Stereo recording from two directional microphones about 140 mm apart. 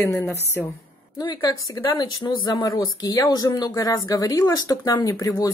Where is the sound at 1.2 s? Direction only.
30° left (ahead or behind).